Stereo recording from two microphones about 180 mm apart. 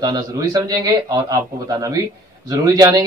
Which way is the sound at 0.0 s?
20° right (ahead or behind).